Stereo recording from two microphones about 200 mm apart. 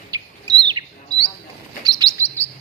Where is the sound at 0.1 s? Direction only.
20° right (ahead or behind).